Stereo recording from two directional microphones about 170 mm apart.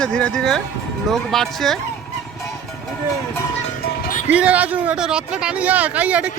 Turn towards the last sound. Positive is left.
turn(degrees=-10)  # may be behind; listen again after turning